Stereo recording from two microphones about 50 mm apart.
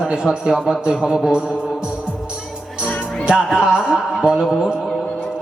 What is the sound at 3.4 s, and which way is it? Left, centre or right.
A man's voice, centre.